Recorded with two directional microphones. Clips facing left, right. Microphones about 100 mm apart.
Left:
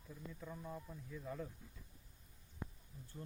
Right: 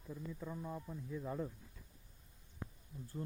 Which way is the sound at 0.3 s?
15° right (ahead or behind).